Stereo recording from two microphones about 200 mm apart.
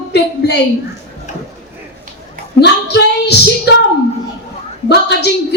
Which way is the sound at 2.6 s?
55° left (ahead or behind).